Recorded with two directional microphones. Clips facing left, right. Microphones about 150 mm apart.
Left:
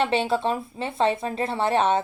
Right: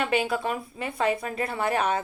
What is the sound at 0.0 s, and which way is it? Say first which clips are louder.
A woman's voice: left 3 dB; 30° left (ahead or behind).